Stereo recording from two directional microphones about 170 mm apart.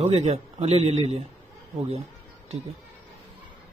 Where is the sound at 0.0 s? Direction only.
40° right (ahead or behind).